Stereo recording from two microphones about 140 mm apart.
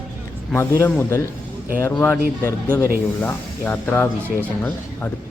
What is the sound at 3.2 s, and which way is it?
Speech, 10° left (ahead or behind).